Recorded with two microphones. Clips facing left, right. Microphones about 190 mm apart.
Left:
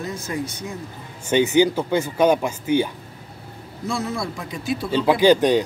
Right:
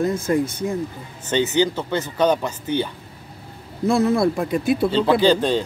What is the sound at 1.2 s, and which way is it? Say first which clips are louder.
Speech: left 3 dB; 15° left (ahead or behind).